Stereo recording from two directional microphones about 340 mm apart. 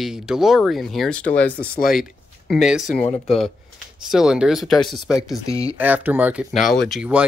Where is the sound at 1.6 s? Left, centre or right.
Left.